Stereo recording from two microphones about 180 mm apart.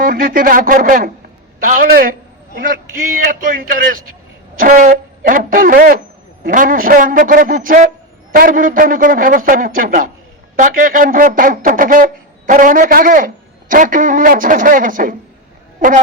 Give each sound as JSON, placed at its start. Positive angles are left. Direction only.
{"t": 0.0, "sound": "a man's voice", "side_deg": -55}